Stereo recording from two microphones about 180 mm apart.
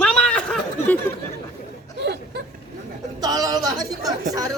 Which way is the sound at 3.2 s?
20° right (ahead or behind).